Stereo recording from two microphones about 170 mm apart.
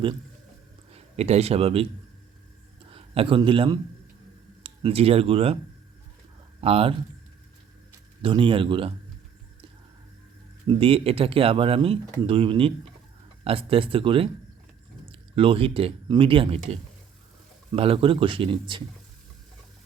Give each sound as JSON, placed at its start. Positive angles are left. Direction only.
{"t": 0.9, "sound": "a man's voice", "side_deg": -40}
{"t": 2.9, "sound": "a man's voice", "side_deg": -35}
{"t": 6.6, "sound": "speech", "side_deg": -35}
{"t": 8.2, "sound": "speech", "side_deg": -30}
{"t": 10.7, "sound": "speech", "side_deg": -35}